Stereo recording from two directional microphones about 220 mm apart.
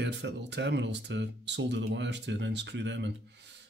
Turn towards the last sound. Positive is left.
turn(degrees=-50)  # may be behind; listen again after turning